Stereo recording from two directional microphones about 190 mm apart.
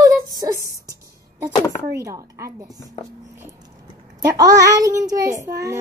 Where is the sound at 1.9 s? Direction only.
15° right (ahead or behind).